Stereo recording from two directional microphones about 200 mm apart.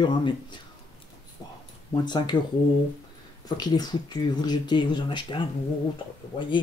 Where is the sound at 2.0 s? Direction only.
20° left (ahead or behind).